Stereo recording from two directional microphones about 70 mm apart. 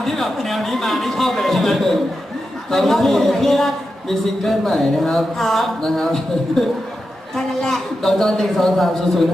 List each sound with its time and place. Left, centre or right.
0.0 s speech: centre